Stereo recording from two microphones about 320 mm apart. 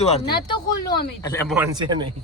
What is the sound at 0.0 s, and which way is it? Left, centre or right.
Speech, centre.